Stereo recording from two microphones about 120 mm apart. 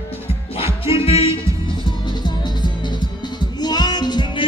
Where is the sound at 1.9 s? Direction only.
35° left (ahead or behind).